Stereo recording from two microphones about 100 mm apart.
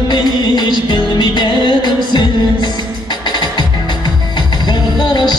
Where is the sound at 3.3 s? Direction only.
45° left (ahead or behind).